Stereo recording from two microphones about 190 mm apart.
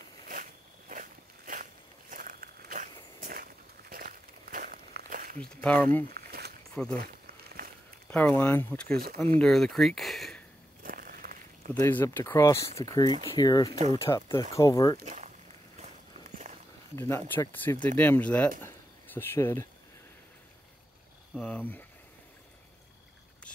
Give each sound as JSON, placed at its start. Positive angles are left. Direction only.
{"t": 0.3, "sound": "a sound", "side_deg": -45}
{"t": 5.4, "sound": "speech", "side_deg": 5}
{"t": 6.0, "sound": "walk", "side_deg": -55}
{"t": 6.7, "sound": "speech", "side_deg": 5}
{"t": 7.6, "sound": "a sound", "side_deg": -55}
{"t": 8.1, "sound": "speech", "side_deg": 10}
{"t": 9.4, "sound": "speech", "side_deg": 0}
{"t": 10.8, "sound": "a sound", "side_deg": -45}
{"t": 11.8, "sound": "speech", "side_deg": 10}
{"t": 15.0, "sound": "walk", "side_deg": -40}
{"t": 16.9, "sound": "speech", "side_deg": 15}
{"t": 21.4, "sound": "a sound", "side_deg": 10}